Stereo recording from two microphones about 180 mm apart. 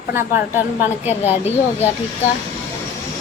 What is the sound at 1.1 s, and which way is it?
Speech, 35° left (ahead or behind).